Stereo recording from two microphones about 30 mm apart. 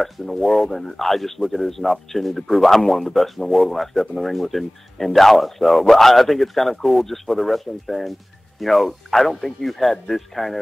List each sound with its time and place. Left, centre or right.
0.0 s a man's voice: centre